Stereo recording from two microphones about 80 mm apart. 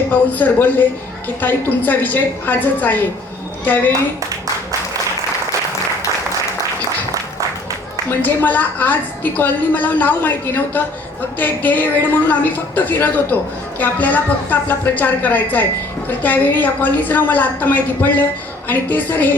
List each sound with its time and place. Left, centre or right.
0.1 s a woman's voice: left
8.3 s a woman's voice: left